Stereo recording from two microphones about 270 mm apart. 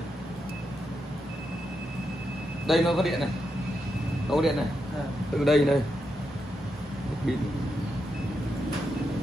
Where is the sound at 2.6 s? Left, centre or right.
Centre.